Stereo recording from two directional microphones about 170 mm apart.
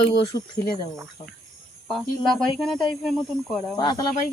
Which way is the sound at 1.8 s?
Centre (ahead or behind).